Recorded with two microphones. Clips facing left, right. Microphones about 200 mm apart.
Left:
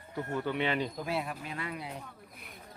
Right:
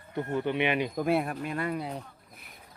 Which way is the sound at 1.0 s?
55° right (ahead or behind).